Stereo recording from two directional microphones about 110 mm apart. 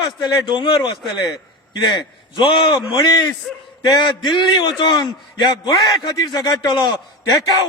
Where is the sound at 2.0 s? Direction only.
45° left (ahead or behind).